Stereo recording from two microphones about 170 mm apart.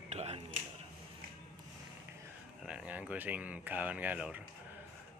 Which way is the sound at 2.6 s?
5° right (ahead or behind).